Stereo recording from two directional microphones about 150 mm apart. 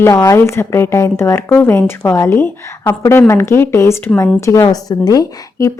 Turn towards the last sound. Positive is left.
turn(degrees=25)  # may be behind; listen again after turning